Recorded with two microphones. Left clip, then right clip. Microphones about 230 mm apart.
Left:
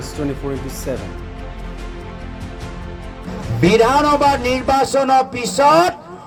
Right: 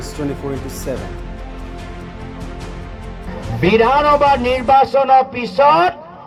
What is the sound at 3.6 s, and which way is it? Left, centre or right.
A man's voice, left.